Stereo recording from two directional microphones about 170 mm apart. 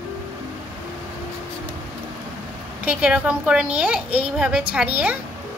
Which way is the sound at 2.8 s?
10° right (ahead or behind).